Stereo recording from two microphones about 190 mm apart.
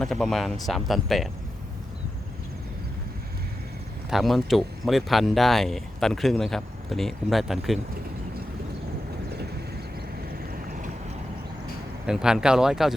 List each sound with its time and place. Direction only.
0.0 s speech: centre (ahead or behind)
4.1 s speech: centre (ahead or behind)
10.5 s vehicle: 45° right (ahead or behind)
12.0 s speech: 5° right (ahead or behind)